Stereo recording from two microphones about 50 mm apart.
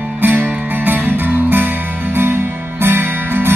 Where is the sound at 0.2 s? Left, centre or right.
Right.